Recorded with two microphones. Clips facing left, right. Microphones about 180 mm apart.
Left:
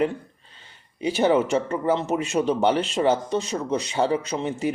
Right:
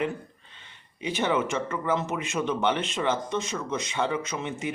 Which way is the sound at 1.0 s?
35° left (ahead or behind).